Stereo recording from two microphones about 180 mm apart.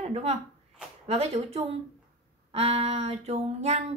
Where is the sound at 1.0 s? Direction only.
35° right (ahead or behind).